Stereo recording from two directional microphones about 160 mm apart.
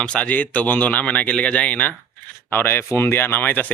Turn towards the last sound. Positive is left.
turn(degrees=10)  # may be behind; listen again after turning